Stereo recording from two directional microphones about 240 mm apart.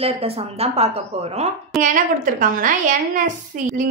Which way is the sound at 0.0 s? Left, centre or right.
Right.